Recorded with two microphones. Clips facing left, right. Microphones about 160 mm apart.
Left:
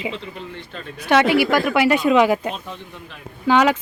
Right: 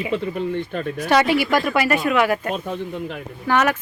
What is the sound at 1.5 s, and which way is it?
Speech, 10° left (ahead or behind).